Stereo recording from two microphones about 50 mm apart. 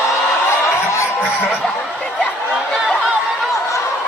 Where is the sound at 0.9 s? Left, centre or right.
Left.